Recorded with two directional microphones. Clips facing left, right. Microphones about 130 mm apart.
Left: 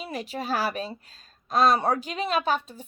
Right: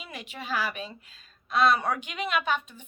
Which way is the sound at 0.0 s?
35° left (ahead or behind).